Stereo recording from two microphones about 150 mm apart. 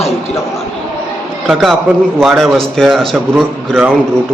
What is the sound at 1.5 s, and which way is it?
Speech, centre (ahead or behind).